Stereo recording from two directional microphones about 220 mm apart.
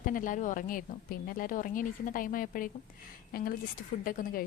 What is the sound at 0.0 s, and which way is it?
A woman's voice, 35° left (ahead or behind).